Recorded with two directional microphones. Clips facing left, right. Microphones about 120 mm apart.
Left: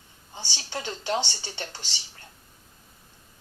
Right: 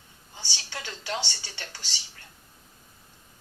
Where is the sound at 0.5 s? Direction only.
25° left (ahead or behind).